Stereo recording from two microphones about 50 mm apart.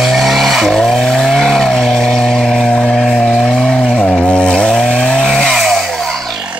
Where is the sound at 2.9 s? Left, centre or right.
Centre.